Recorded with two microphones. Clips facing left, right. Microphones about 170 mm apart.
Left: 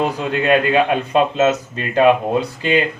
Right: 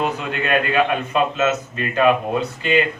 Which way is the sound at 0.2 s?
30° left (ahead or behind).